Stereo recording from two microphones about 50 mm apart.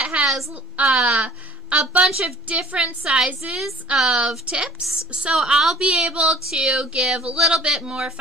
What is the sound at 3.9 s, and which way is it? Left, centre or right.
Speech, centre.